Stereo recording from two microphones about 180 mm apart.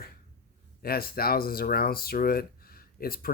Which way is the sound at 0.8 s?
55° left (ahead or behind).